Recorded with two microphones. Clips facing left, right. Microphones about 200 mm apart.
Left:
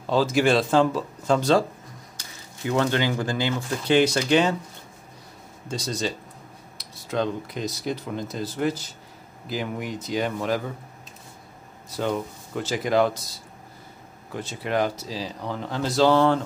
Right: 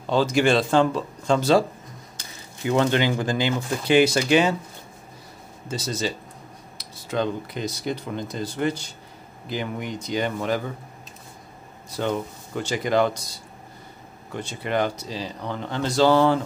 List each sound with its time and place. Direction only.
0.0 s speech: centre (ahead or behind)
2.7 s speech: 20° right (ahead or behind)
5.7 s speech: 5° right (ahead or behind)
11.9 s speech: centre (ahead or behind)